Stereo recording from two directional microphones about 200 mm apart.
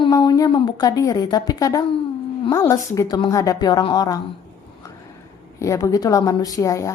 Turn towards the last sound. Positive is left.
turn(degrees=15)  # may be behind; listen again after turning